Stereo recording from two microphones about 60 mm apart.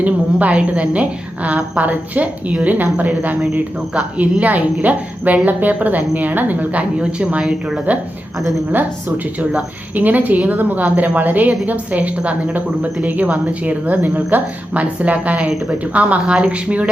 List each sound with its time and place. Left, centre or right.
0.0 s a woman's voice: right